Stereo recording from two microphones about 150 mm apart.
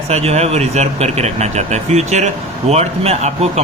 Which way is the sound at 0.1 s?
45° right (ahead or behind).